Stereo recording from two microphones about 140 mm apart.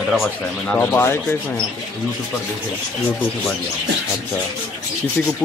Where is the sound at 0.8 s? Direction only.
15° left (ahead or behind).